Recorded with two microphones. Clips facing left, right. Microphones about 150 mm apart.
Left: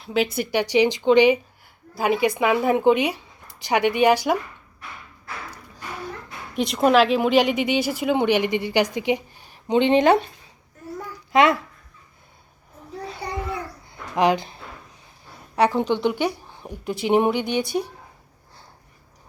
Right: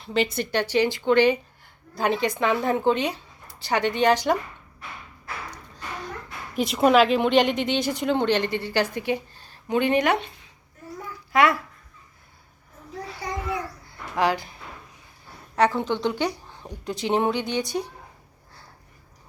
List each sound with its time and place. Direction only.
0.0 s speech: 5° left (ahead or behind)
6.6 s speech: centre (ahead or behind); by 10.2 s 30° left (ahead or behind)
11.3 s speech: 20° left (ahead or behind)
14.2 s speech: 20° left (ahead or behind)
15.5 s speech: 15° left (ahead or behind)
16.5 s a sound: 10° left (ahead or behind)
17.0 s speech: 15° left (ahead or behind)